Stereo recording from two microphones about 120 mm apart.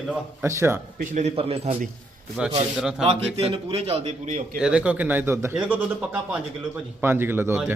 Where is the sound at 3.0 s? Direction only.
55° right (ahead or behind).